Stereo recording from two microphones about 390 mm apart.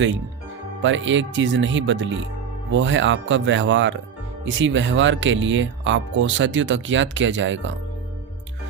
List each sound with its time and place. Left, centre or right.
0.8 s speech: right